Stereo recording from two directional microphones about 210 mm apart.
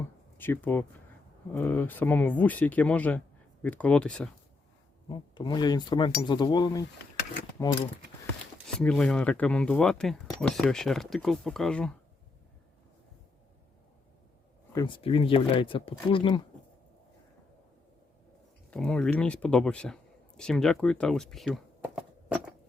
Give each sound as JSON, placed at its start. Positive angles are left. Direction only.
{"t": 0.3, "sound": "speech", "side_deg": 10}
{"t": 5.0, "sound": "speech", "side_deg": 20}
{"t": 8.6, "sound": "speech", "side_deg": 5}
{"t": 14.7, "sound": "speech", "side_deg": 20}
{"t": 18.7, "sound": "speech", "side_deg": 5}